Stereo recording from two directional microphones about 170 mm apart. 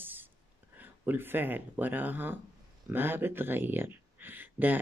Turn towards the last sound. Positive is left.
turn(degrees=-10)  # may be behind; listen again after turning